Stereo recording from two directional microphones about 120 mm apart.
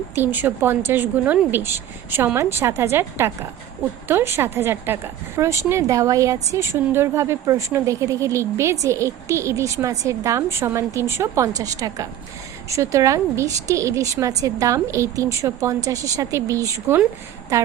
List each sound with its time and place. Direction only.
0.2 s a woman's voice: 15° right (ahead or behind)